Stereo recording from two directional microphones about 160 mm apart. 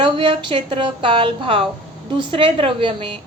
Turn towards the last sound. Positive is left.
turn(degrees=-30)  # may be behind; listen again after turning